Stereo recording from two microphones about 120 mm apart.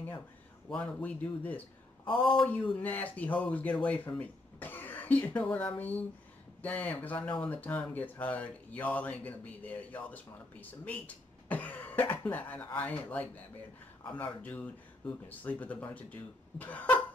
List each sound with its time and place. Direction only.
0.7 s speech: 15° left (ahead or behind)
2.0 s speech: 45° left (ahead or behind)
2.8 s speech: 15° left (ahead or behind)